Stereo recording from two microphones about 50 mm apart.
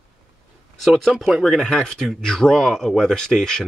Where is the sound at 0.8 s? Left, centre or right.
Centre.